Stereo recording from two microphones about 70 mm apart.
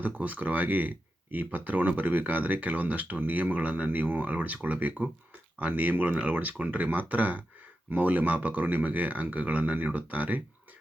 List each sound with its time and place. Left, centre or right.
0.0 s speech: right